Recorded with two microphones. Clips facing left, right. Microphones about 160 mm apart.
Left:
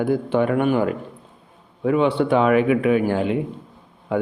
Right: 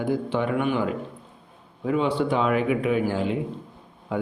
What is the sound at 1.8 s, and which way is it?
A man's voice, 65° left (ahead or behind).